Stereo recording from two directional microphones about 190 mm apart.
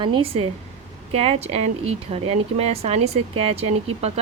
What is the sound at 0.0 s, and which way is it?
Speech, 25° right (ahead or behind).